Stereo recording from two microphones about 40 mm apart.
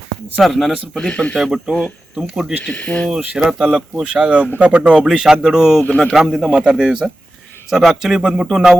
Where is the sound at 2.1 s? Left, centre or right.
Centre.